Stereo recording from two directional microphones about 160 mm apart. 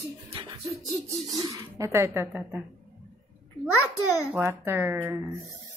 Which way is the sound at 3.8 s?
20° left (ahead or behind).